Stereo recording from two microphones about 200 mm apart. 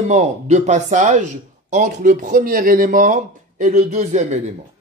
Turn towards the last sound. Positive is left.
turn(degrees=-35)  # may be behind; listen again after turning